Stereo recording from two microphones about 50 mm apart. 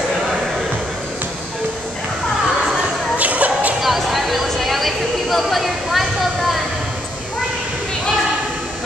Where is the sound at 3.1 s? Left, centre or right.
Right.